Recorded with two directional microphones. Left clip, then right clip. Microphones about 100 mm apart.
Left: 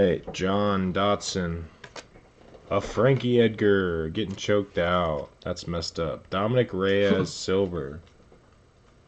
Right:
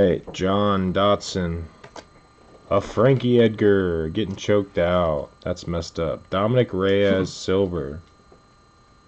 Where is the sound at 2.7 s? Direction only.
Centre (ahead or behind).